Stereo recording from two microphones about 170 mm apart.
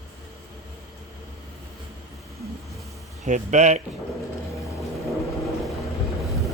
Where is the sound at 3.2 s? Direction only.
45° right (ahead or behind).